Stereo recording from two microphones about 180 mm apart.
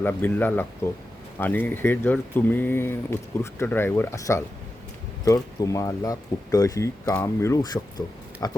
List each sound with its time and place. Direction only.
0.0 s speech: 10° left (ahead or behind)